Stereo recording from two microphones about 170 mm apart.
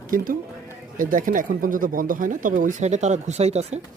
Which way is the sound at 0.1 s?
55° right (ahead or behind).